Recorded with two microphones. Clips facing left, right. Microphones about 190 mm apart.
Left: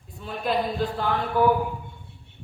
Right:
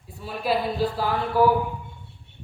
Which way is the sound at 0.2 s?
5° right (ahead or behind).